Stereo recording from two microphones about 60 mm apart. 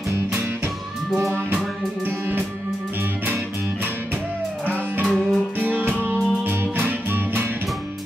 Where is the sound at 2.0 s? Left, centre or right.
Right.